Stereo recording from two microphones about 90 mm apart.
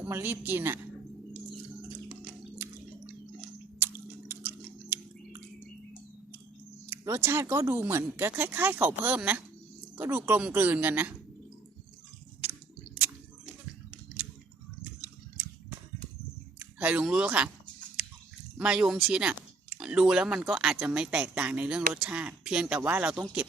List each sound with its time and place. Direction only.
0.0 s speech: 20° right (ahead or behind)
3.8 s chewing: 25° right (ahead or behind)
6.9 s speech: 30° right (ahead or behind)
16.6 s speech: 15° right (ahead or behind)
18.6 s speech: 10° right (ahead or behind)